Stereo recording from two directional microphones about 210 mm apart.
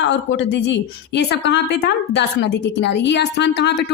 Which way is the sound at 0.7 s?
55° left (ahead or behind).